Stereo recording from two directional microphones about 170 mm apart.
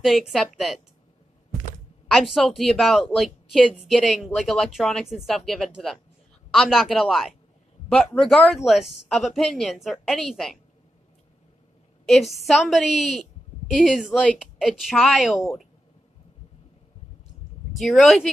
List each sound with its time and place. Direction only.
0.0 s a woman's voice: centre (ahead or behind)
2.1 s a woman's voice: centre (ahead or behind)
12.1 s a woman's voice: centre (ahead or behind)
17.7 s a woman's voice: centre (ahead or behind)